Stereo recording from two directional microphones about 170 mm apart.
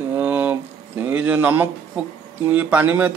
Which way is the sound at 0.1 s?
10° right (ahead or behind).